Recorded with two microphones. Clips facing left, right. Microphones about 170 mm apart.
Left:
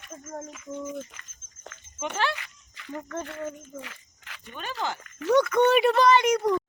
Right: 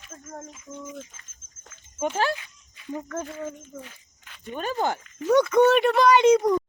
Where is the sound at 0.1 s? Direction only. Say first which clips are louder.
Left 3 dB; 10° left (ahead or behind).